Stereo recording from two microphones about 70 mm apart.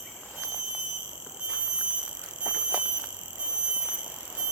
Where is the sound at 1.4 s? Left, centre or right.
Centre.